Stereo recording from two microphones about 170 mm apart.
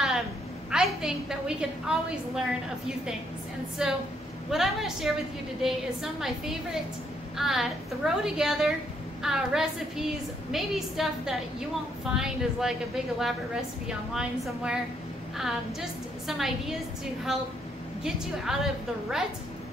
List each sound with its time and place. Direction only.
0.7 s a woman's voice: 5° right (ahead or behind)
3.8 s a woman's voice: 5° right (ahead or behind)